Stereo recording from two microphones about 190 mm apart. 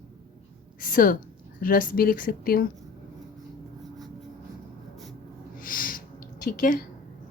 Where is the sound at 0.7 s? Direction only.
45° left (ahead or behind).